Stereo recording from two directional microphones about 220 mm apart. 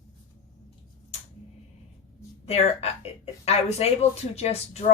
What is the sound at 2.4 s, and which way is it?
A woman's voice, 30° left (ahead or behind).